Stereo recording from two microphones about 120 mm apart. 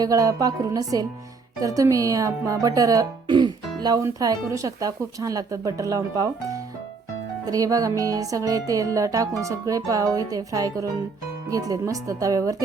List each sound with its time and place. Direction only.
0.0 s speech: 30° right (ahead or behind)